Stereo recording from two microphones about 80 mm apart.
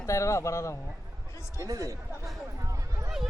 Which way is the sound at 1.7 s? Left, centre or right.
Right.